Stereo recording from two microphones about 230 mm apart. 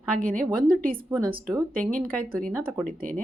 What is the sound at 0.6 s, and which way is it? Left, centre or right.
Speech, right.